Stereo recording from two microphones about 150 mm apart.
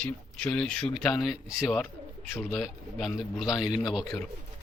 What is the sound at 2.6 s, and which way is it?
A man's voice, centre (ahead or behind).